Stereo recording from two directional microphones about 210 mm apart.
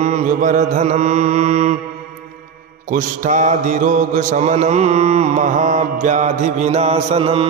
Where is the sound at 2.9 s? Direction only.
35° right (ahead or behind).